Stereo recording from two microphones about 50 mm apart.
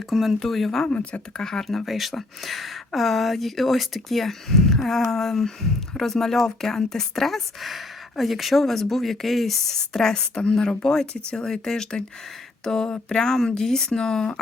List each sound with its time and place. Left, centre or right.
0.1 s speech: centre
0.3 s speech: centre
0.9 s speech: left
1.4 s speech: centre
9.9 s speech: centre